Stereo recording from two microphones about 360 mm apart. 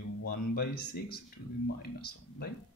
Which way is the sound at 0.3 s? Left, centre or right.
Left.